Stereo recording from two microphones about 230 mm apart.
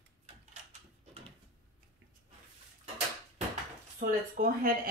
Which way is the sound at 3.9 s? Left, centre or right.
Right.